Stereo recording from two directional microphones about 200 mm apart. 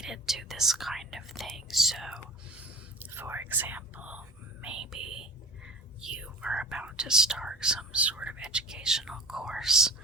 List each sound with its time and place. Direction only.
0.0 s speech: centre (ahead or behind)